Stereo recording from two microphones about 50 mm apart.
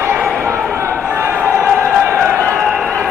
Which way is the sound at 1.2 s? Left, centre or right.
Right.